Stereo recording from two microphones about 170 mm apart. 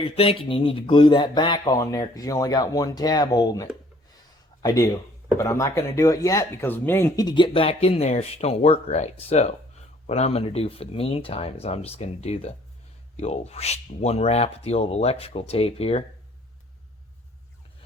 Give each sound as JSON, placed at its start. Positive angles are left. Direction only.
{"t": 0.0, "sound": "speech", "side_deg": 35}